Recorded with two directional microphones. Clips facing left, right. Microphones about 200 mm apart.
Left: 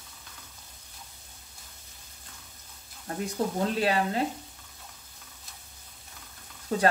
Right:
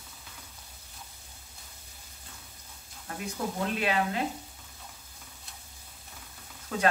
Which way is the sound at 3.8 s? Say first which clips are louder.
Left 2 dB; 35° left (ahead or behind).